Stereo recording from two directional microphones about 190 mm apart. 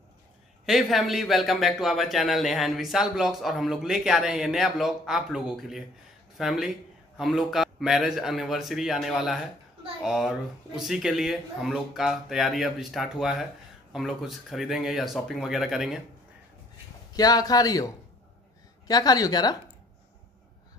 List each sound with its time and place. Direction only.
0.7 s speech: centre (ahead or behind)
17.1 s a man's voice: 20° left (ahead or behind)